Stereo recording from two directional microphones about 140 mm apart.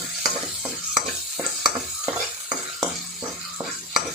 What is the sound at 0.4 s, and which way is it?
Stir, 5° right (ahead or behind).